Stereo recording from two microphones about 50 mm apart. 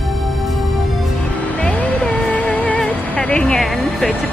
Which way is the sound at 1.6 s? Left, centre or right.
Left.